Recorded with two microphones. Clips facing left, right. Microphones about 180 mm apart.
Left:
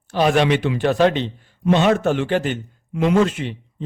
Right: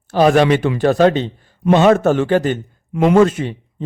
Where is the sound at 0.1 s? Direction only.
45° right (ahead or behind).